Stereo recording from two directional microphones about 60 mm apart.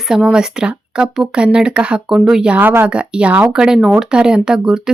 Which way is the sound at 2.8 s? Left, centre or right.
Centre.